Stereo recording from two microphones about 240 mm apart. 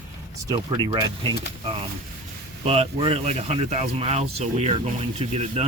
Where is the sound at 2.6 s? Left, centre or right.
Right.